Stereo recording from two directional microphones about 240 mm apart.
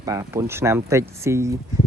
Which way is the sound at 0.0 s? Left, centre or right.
Centre.